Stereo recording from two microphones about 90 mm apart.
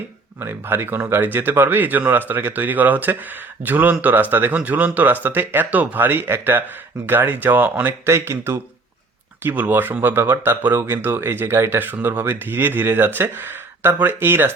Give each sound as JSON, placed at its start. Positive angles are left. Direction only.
{"t": 0.3, "sound": "speech", "side_deg": -25}